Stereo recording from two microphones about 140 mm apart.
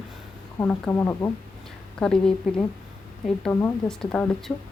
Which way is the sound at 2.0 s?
5° left (ahead or behind).